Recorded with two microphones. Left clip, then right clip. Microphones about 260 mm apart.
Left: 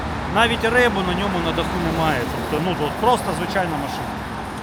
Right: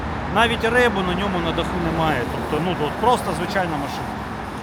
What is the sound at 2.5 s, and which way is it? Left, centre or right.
Speech, left.